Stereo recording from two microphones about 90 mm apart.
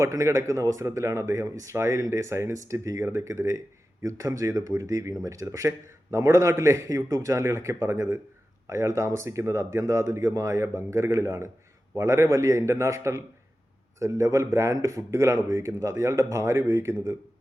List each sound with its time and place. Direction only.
0.0 s speech: 35° right (ahead or behind)